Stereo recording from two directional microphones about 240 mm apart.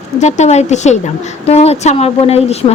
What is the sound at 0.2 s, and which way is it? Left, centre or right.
Speech, left.